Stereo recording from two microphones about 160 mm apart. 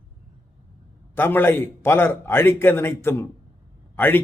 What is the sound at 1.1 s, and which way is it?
A man's voice, 15° left (ahead or behind).